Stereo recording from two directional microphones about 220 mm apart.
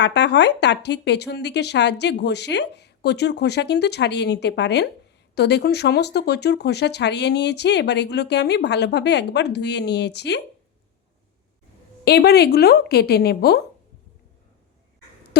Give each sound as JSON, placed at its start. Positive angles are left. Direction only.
{"t": 0.0, "sound": "speech", "side_deg": 50}
{"t": 12.0, "sound": "speech", "side_deg": 45}